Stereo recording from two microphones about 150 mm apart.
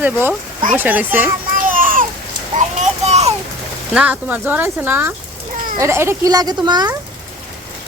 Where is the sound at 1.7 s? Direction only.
65° right (ahead or behind).